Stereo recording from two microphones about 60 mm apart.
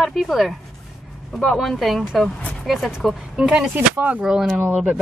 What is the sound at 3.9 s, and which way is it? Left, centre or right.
Speech, right.